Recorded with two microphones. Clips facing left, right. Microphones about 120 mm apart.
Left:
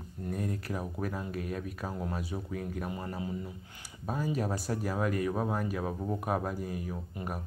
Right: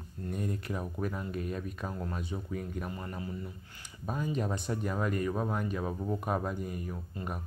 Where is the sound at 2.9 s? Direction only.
20° left (ahead or behind).